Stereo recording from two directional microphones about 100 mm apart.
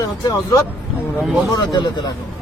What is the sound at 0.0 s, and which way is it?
A man's voice, 35° left (ahead or behind).